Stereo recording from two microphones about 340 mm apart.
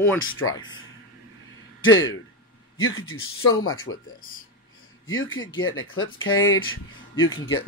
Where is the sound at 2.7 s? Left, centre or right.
Left.